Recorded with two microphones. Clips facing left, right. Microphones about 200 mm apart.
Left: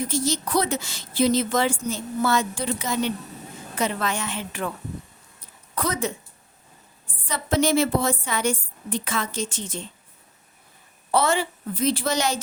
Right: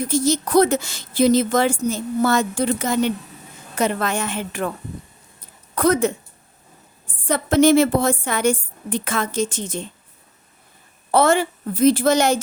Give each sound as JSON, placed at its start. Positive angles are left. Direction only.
{"t": 0.0, "sound": "a woman's voice", "side_deg": -45}
{"t": 5.7, "sound": "speech", "side_deg": -50}
{"t": 7.2, "sound": "a woman's voice", "side_deg": -50}
{"t": 11.1, "sound": "a woman's voice", "side_deg": -50}